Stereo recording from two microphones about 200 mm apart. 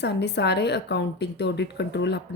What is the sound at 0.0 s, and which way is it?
A woman's voice, 60° left (ahead or behind).